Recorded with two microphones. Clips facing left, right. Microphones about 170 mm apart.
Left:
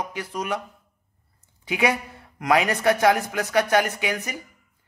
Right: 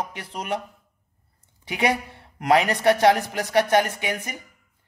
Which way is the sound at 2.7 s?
30° right (ahead or behind).